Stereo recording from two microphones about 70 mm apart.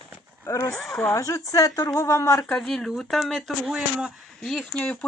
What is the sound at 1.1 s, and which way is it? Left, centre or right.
Speech, left.